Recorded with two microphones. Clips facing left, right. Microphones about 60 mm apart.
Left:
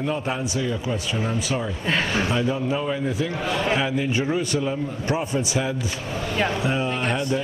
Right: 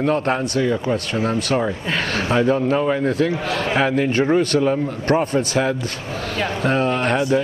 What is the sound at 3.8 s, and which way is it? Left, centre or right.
A man's voice, right.